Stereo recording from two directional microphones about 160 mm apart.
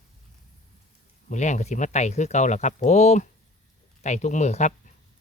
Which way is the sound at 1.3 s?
50° left (ahead or behind).